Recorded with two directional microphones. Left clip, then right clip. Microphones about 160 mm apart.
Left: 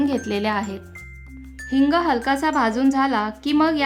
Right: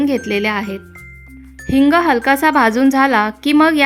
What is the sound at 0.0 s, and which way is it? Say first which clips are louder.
Speech: right 6 dB; 20° right (ahead or behind).